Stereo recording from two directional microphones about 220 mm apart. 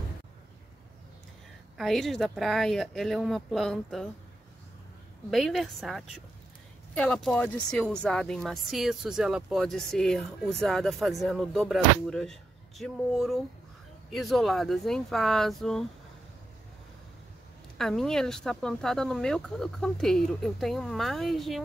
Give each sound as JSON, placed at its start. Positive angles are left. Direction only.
{"t": 1.8, "sound": "speech", "side_deg": 0}
{"t": 5.3, "sound": "speech", "side_deg": 0}
{"t": 17.7, "sound": "speech", "side_deg": 0}